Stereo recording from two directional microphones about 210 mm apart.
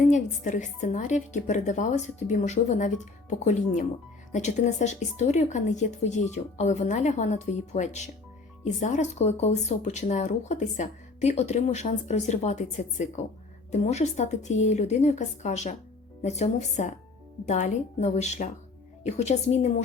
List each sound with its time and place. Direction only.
0.0 s speech: 35° left (ahead or behind)